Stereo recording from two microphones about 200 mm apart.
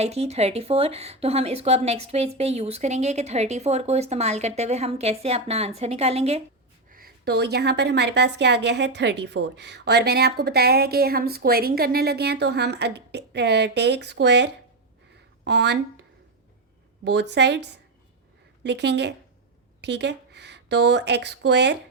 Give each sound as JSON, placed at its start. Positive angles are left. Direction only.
{"t": 0.0, "sound": "speech", "side_deg": -30}
{"t": 6.9, "sound": "a woman's voice", "side_deg": -50}
{"t": 17.0, "sound": "a woman's voice", "side_deg": -60}